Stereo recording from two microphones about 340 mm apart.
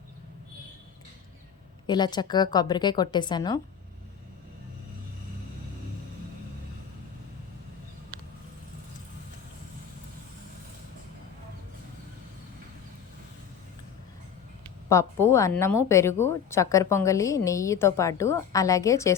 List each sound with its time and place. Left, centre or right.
1.9 s a woman's voice: centre
14.8 s a woman's voice: centre